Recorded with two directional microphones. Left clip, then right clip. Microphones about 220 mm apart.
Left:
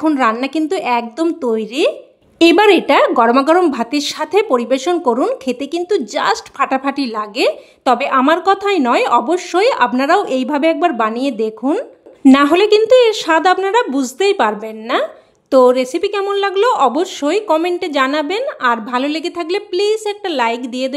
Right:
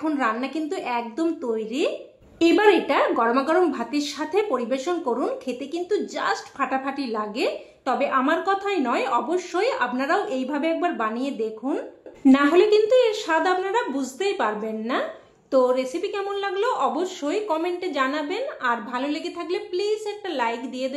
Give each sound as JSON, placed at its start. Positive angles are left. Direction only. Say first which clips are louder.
{"t": 0.0, "sound": "speech", "louder": "left 10 dB", "side_deg": 45}